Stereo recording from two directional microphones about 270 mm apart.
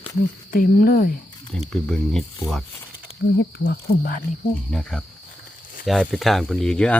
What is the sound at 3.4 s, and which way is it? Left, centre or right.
Cricket, left.